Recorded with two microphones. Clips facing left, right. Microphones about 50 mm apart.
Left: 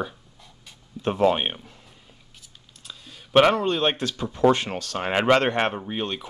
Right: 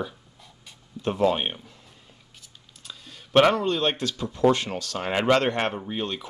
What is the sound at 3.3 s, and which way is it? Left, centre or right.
Speech, centre.